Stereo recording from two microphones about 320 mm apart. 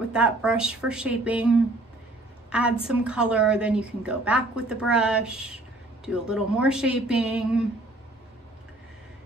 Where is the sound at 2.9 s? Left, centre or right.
Centre.